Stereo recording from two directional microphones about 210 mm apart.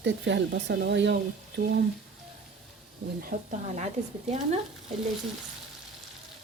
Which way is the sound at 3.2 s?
40° right (ahead or behind).